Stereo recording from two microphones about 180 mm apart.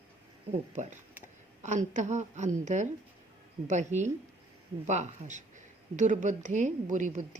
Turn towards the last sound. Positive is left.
turn(degrees=-45)  # may be behind; listen again after turning